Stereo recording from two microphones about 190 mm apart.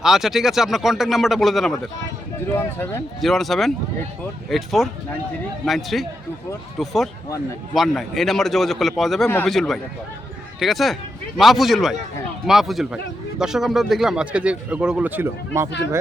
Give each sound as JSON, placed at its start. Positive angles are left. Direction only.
{"t": 0.0, "sound": "speech", "side_deg": 0}